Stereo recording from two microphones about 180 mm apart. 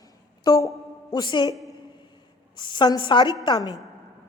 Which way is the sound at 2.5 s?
25° left (ahead or behind).